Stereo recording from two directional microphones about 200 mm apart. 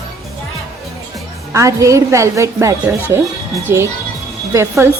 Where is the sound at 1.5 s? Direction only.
15° right (ahead or behind).